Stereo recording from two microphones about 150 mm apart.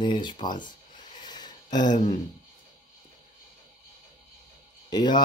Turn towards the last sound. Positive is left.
turn(degrees=30)  # may be behind; listen again after turning